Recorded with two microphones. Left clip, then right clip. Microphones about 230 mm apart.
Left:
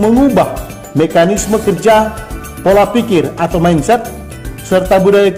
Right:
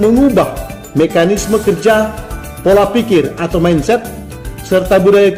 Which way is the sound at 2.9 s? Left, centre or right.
Centre.